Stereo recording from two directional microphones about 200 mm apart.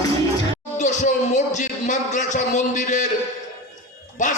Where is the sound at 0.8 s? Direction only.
35° left (ahead or behind).